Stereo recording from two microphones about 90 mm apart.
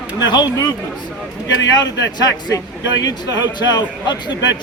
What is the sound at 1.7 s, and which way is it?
Speech, 50° left (ahead or behind).